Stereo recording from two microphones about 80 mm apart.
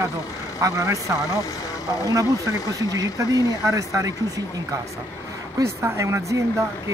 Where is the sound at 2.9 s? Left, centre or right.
Right.